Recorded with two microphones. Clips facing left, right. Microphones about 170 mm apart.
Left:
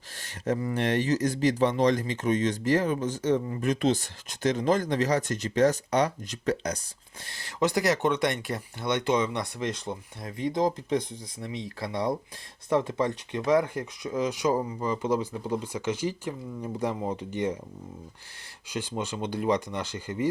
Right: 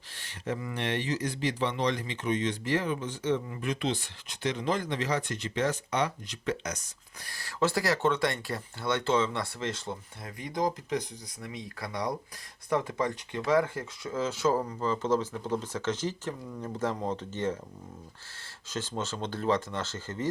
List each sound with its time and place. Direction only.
0.2 s speech: 45° left (ahead or behind)
7.3 s speech: 20° left (ahead or behind)
18.7 s speech: 15° left (ahead or behind)